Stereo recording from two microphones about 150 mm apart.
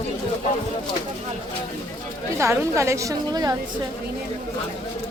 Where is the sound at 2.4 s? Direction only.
20° right (ahead or behind).